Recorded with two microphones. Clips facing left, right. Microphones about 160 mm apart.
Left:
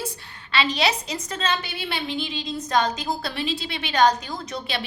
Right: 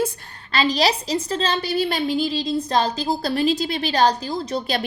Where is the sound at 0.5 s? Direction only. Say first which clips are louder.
Right 3 dB; 35° right (ahead or behind).